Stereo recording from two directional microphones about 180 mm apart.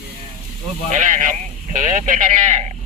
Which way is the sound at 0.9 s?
45° right (ahead or behind).